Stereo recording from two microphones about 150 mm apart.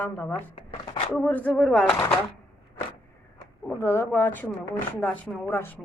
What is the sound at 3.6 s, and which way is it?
Speech, 15° left (ahead or behind).